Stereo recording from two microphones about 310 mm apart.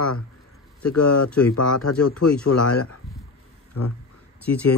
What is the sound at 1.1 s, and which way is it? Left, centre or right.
Speech, left.